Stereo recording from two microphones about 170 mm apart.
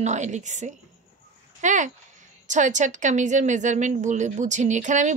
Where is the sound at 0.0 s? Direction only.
45° right (ahead or behind).